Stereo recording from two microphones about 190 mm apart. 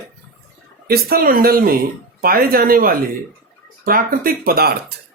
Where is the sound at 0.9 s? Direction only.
50° right (ahead or behind).